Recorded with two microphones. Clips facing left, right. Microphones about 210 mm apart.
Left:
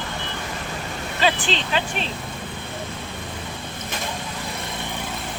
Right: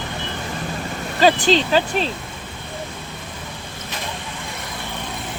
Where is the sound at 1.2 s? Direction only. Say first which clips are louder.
Right 8 dB; 40° right (ahead or behind).